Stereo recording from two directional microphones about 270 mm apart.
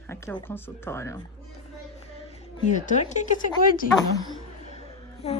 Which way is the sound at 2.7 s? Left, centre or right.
Left.